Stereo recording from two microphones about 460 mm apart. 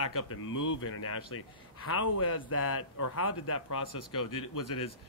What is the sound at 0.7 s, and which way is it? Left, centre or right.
A man's voice, left.